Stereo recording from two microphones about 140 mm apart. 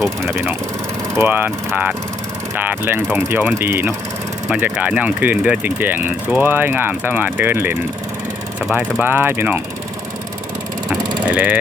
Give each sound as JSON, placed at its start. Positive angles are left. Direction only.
{"t": 1.1, "sound": "speech", "side_deg": -15}
{"t": 11.3, "sound": "speech", "side_deg": -10}